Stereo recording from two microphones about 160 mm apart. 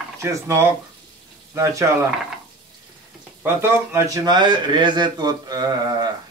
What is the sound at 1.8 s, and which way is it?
Speech, 15° right (ahead or behind).